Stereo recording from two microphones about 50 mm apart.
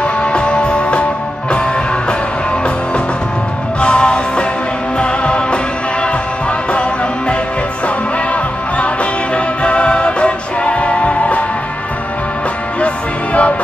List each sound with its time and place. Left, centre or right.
0.0 s music: centre
3.8 s music: left
6.7 s music: left
12.8 s music: left